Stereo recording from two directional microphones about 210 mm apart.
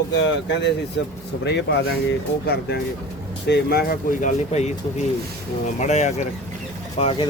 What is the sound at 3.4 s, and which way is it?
Speech, 50° left (ahead or behind).